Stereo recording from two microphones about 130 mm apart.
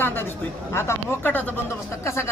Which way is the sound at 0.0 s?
15° left (ahead or behind).